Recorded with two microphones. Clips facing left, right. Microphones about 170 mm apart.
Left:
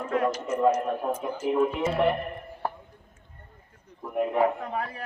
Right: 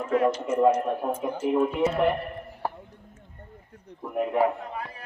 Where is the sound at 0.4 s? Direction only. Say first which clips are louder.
Right 1 dB; 10° right (ahead or behind).